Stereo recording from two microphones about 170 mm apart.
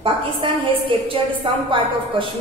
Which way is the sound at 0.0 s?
30° right (ahead or behind).